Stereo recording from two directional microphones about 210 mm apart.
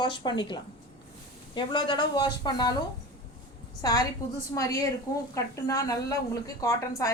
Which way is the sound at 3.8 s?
20° left (ahead or behind).